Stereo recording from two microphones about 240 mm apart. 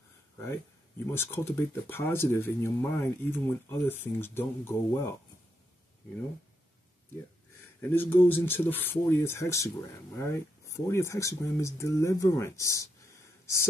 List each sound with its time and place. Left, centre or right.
1.1 s speech: centre
7.9 s speech: centre